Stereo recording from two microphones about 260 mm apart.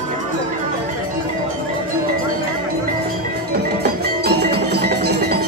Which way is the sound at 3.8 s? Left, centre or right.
Right.